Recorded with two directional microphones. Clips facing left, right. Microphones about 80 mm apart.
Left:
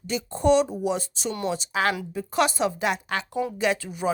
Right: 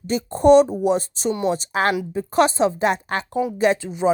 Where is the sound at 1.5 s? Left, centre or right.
Right.